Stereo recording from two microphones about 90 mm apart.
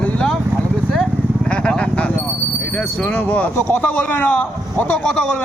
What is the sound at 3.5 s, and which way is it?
Speech, 25° left (ahead or behind).